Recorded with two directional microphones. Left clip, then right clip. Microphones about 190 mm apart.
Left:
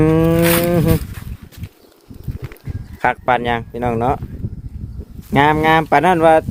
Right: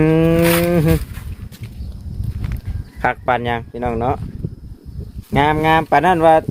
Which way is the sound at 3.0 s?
15° left (ahead or behind).